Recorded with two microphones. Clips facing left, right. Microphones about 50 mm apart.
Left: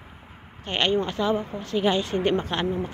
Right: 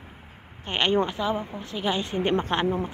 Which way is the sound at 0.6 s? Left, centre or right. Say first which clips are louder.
Even; centre.